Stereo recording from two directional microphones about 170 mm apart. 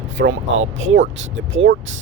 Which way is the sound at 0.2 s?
90° right.